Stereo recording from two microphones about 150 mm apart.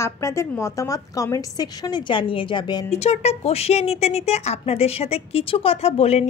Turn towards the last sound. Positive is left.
turn(degrees=45)  # may be behind; listen again after turning